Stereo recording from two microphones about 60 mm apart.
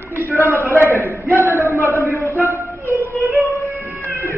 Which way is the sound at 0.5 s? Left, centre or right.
Left.